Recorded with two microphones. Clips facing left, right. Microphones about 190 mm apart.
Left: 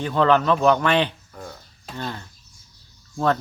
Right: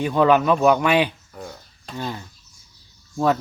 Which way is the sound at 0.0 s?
15° right (ahead or behind).